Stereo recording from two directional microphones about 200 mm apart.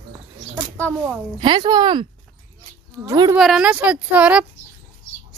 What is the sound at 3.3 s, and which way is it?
A woman's voice, 5° right (ahead or behind).